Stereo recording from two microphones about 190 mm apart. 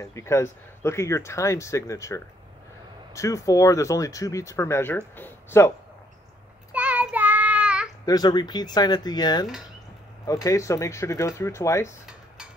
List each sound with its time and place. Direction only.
0.0 s speech: 15° left (ahead or behind)
6.7 s child singing: 10° right (ahead or behind)
8.0 s speech: 20° left (ahead or behind)